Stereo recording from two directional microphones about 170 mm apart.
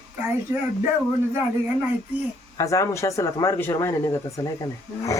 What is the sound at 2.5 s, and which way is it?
Speech, 20° left (ahead or behind).